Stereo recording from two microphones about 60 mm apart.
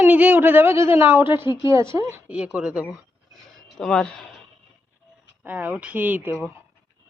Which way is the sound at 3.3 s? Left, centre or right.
Centre.